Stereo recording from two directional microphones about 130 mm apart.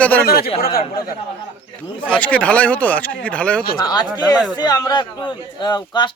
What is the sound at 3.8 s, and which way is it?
A man's voice, 30° left (ahead or behind).